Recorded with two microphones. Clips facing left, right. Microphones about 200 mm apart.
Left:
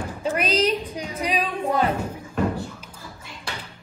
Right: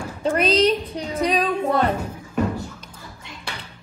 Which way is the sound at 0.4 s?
30° right (ahead or behind).